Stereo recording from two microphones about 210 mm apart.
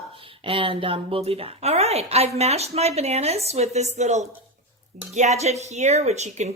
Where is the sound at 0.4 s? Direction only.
25° right (ahead or behind).